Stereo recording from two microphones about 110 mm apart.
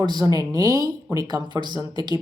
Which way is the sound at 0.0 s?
40° right (ahead or behind).